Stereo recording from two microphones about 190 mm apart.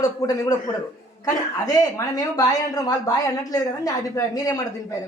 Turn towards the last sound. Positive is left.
turn(degrees=15)  # may be behind; listen again after turning